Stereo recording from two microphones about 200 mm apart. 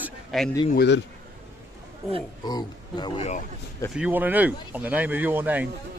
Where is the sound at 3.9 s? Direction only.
5° right (ahead or behind).